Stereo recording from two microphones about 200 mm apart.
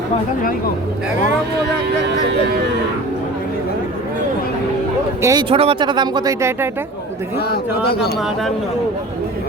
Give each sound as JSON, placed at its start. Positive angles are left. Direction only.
{"t": 5.2, "sound": "speech", "side_deg": -20}
{"t": 7.3, "sound": "speech", "side_deg": 50}